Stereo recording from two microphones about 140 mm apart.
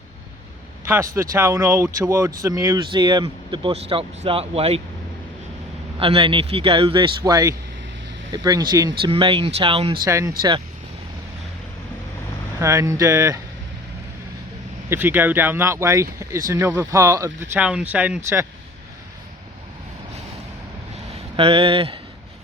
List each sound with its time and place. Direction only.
1.1 s speech: 20° right (ahead or behind); by 4.8 s 45° right (ahead or behind)
6.0 s speech: 40° right (ahead or behind)
7.3 s speech: 25° right (ahead or behind)
10.0 s speech: 20° right (ahead or behind)
12.5 s speech: 20° right (ahead or behind)
14.8 s speech: 15° right (ahead or behind)
21.3 s speech: 40° right (ahead or behind)